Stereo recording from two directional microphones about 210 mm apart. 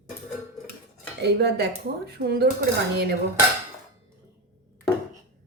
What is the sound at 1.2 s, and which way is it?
A woman's voice, 50° right (ahead or behind).